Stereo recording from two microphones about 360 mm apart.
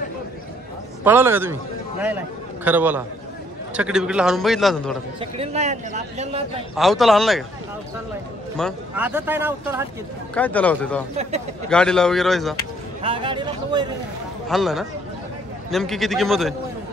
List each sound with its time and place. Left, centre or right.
1.0 s a man's voice: centre
5.2 s a man's voice: centre
6.7 s speech: centre
8.5 s speech: centre
10.3 s speech: centre
13.0 s a man's voice: centre
14.5 s speech: centre